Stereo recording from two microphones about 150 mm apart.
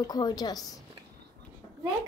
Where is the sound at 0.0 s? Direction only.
25° left (ahead or behind).